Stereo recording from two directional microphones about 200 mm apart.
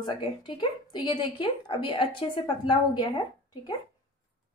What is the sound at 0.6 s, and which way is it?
A woman's voice, 25° left (ahead or behind).